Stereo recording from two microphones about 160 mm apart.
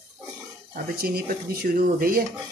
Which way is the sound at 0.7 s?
70° right (ahead or behind).